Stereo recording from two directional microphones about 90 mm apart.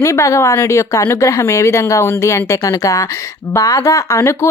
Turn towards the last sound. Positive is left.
turn(degrees=35)  # may be behind; listen again after turning